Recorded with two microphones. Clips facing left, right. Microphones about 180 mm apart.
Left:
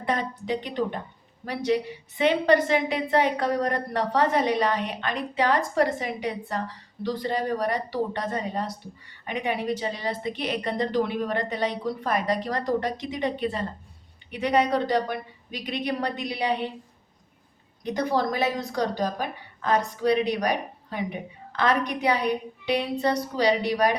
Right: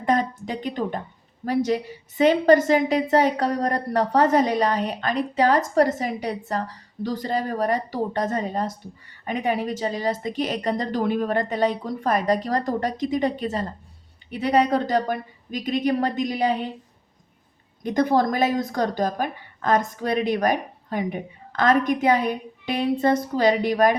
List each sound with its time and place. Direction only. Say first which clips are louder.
0.0 s a woman's voice: right 5 dB; 45° right (ahead or behind)
17.9 s speech: right 5 dB; 50° right (ahead or behind)